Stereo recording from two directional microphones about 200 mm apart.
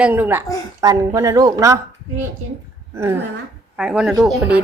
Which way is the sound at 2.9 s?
10° right (ahead or behind).